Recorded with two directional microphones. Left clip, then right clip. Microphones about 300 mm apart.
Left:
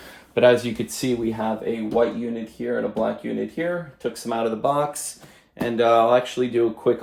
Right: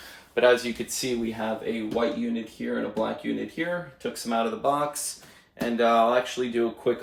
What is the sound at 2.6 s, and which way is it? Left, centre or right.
Speech, centre.